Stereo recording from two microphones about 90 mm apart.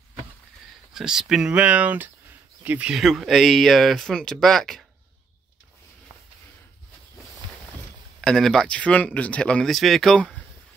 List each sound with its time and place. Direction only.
0.9 s speech: 5° right (ahead or behind)
2.9 s speech: 5° right (ahead or behind)
7.4 s boat: 60° right (ahead or behind)
8.2 s speech: 5° left (ahead or behind)